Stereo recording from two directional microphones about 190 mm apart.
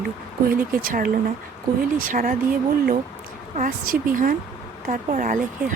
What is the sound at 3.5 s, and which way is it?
Speech, 45° right (ahead or behind).